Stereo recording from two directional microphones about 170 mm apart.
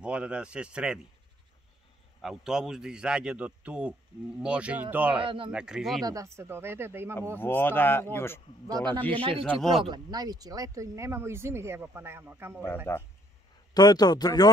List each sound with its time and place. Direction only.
0.0 s speech: 5° right (ahead or behind)
2.2 s a man's voice: 5° right (ahead or behind)
5.2 s speech: 30° right (ahead or behind)
5.5 s a man's voice: 5° right (ahead or behind)
6.0 s speech: 20° right (ahead or behind)
7.3 s speech: 10° left (ahead or behind)
8.6 s a man's voice: 25° right (ahead or behind)
9.4 s a man's voice: centre (ahead or behind)
9.8 s speech: 25° right (ahead or behind)
12.9 s speech: 15° left (ahead or behind)